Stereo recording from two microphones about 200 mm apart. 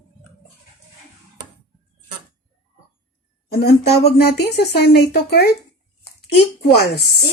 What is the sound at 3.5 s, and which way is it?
Speech, 50° left (ahead or behind).